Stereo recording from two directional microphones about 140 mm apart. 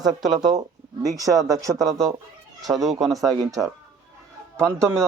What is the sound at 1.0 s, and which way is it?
Speech, 25° right (ahead or behind).